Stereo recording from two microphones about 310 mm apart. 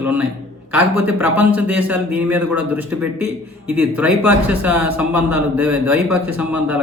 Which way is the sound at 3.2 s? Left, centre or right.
Right.